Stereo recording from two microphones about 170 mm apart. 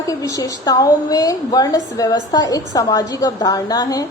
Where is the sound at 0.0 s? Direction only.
20° left (ahead or behind).